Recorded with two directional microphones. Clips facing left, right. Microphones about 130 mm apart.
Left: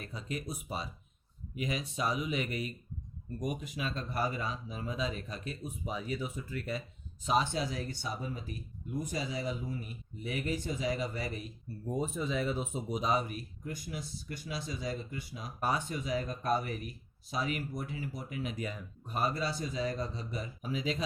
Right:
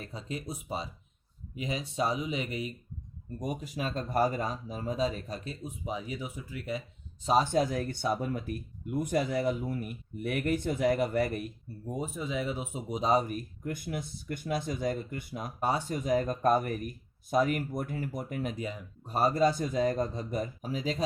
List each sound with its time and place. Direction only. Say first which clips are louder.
0.0 s speech: right 1 dB; 30° right (ahead or behind)
3.3 s speech: right 2 dB; 30° right (ahead or behind)
5.6 s speech: right 1 dB; 20° right (ahead or behind)
7.3 s speech: right 5 dB; 40° right (ahead or behind)
11.9 s speech: left 1 dB; 10° right (ahead or behind)
13.0 s speech: right 6 dB; 35° right (ahead or behind)
18.5 s speech: right 2 dB; 25° right (ahead or behind)
19.1 s speech: right 8 dB; 40° right (ahead or behind)